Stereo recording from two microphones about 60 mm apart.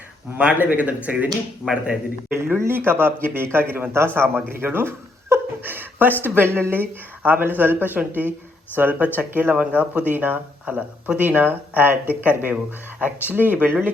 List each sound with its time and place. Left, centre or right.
0.3 s speech: right
2.6 s speech: right